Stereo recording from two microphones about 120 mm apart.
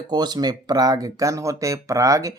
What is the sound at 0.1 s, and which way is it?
Speech, 35° right (ahead or behind).